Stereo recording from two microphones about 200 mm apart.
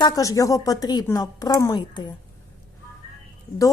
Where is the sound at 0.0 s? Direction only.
15° left (ahead or behind).